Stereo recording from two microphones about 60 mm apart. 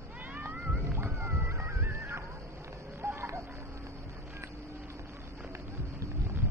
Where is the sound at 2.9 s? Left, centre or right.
Right.